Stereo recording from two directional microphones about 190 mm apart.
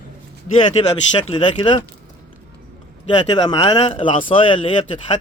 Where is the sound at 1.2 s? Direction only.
30° left (ahead or behind).